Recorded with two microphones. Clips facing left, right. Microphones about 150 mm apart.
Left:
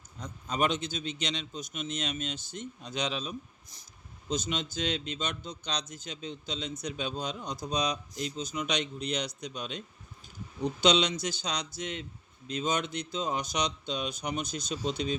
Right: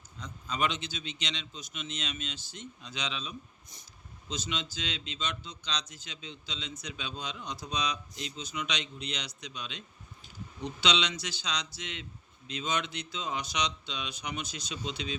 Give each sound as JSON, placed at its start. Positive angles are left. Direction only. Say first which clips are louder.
{"t": 0.2, "sound": "a man's voice", "louder": "left 3 dB", "side_deg": 45}